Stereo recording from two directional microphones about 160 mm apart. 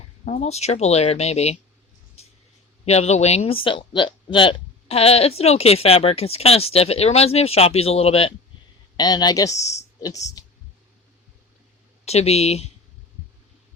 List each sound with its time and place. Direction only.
0.3 s speech: 45° left (ahead or behind)
2.2 s a sound: 40° left (ahead or behind)
2.8 s speech: 40° left (ahead or behind)
9.0 s speech: 25° left (ahead or behind)
10.4 s clicking: 25° left (ahead or behind)
12.0 s speech: 40° left (ahead or behind)